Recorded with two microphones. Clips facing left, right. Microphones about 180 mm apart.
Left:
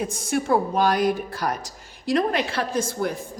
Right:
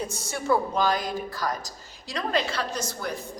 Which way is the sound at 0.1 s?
55° left (ahead or behind).